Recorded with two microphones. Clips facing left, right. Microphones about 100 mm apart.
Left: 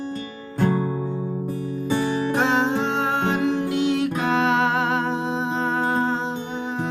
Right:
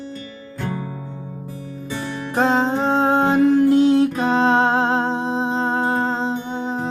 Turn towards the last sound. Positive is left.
turn(degrees=-35)  # may be behind; listen again after turning